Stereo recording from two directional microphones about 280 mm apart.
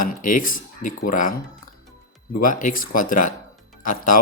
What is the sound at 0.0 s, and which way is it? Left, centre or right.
Speech, left.